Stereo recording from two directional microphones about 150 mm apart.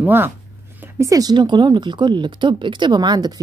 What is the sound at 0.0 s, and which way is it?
Speech, 15° right (ahead or behind).